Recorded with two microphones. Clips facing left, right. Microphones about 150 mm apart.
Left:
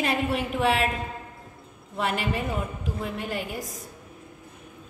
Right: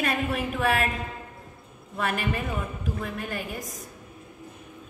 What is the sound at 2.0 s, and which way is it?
A woman's voice, 25° left (ahead or behind).